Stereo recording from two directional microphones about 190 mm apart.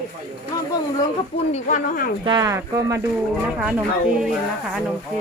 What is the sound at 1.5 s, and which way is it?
Speech, 40° left (ahead or behind).